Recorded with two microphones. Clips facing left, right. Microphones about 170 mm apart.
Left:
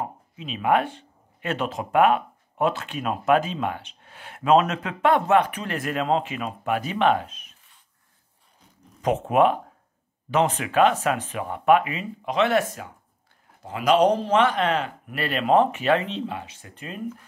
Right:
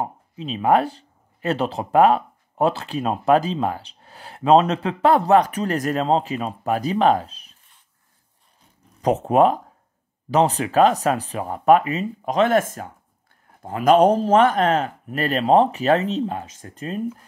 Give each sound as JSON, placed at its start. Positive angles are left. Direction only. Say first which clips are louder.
{"t": 0.0, "sound": "speech", "louder": "right 4 dB", "side_deg": -35}
{"t": 9.0, "sound": "a man's voice", "louder": "right 3 dB", "side_deg": -35}